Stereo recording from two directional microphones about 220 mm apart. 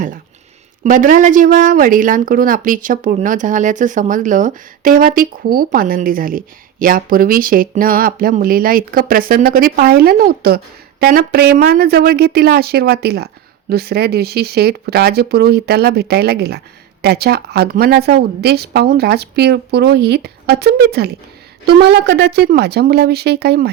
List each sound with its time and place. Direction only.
0.9 s speech: 35° right (ahead or behind)